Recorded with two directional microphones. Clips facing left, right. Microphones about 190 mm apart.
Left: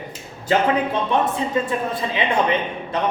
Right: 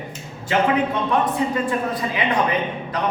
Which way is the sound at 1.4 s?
25° left (ahead or behind).